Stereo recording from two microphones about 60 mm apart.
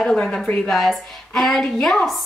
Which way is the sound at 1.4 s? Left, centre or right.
Centre.